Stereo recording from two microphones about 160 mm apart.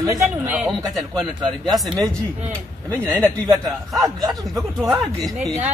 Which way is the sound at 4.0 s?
25° right (ahead or behind).